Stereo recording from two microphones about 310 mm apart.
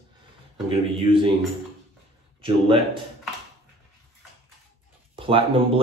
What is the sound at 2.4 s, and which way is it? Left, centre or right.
Speech, centre.